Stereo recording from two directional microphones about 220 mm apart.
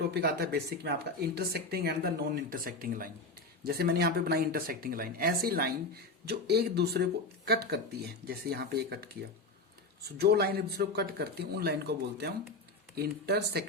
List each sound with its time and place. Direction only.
0.1 s speech: 45° right (ahead or behind)